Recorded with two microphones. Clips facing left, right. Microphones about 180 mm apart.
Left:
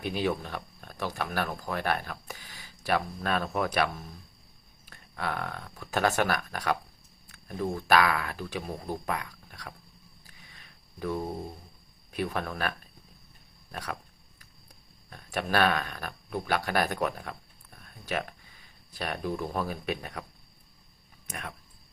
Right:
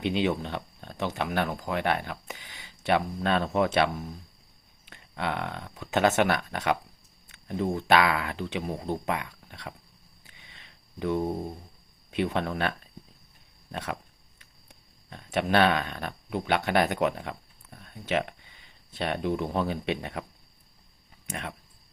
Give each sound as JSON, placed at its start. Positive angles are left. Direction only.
{"t": 0.0, "sound": "speech", "side_deg": -20}
{"t": 4.9, "sound": "speech", "side_deg": -20}
{"t": 10.2, "sound": "a sound", "side_deg": -25}
{"t": 12.1, "sound": "speech", "side_deg": -25}
{"t": 21.2, "sound": "speech", "side_deg": -25}